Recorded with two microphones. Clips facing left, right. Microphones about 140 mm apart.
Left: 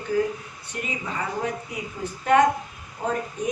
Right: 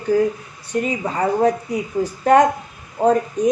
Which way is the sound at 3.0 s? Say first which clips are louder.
Right 12 dB; 55° right (ahead or behind).